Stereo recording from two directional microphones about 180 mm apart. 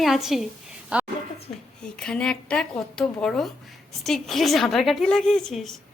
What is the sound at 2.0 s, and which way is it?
A woman's voice, 5° left (ahead or behind).